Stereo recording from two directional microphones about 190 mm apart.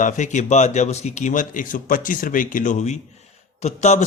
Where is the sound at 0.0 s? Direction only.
40° left (ahead or behind).